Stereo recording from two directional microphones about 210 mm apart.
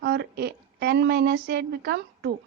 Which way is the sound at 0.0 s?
50° right (ahead or behind).